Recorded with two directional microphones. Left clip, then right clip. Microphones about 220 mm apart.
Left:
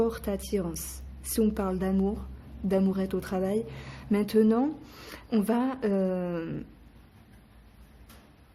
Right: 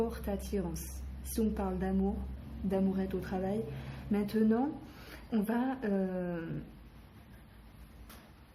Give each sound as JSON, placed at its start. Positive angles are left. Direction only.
{"t": 0.0, "sound": "a woman's voice", "side_deg": 50}